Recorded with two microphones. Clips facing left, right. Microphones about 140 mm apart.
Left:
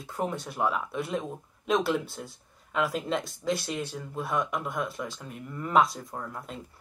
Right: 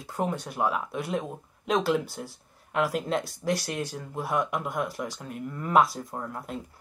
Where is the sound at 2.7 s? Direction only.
Centre (ahead or behind).